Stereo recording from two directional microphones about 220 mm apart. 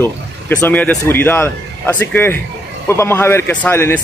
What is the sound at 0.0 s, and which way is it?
A man's voice, 10° left (ahead or behind).